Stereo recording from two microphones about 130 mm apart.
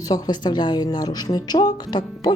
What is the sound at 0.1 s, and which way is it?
A woman's voice, 35° left (ahead or behind).